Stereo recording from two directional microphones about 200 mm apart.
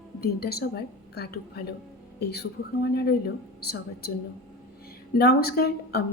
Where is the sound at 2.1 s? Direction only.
55° left (ahead or behind).